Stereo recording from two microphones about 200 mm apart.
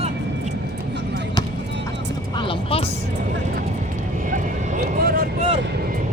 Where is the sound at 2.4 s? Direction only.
25° left (ahead or behind).